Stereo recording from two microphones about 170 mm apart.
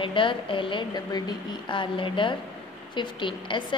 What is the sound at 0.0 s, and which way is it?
A woman's voice, 30° left (ahead or behind).